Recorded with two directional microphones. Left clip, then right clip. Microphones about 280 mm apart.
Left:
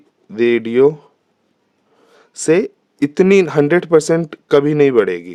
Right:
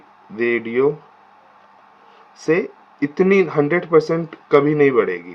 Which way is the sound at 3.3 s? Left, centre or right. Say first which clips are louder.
Left 4 dB; left.